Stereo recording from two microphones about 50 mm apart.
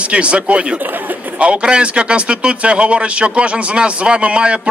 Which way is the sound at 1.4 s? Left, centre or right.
Right.